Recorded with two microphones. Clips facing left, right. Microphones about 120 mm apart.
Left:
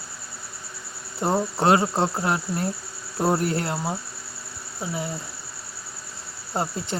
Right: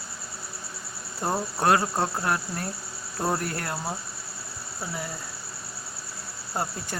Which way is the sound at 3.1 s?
15° left (ahead or behind).